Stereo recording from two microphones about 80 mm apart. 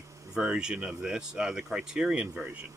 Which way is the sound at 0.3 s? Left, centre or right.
Centre.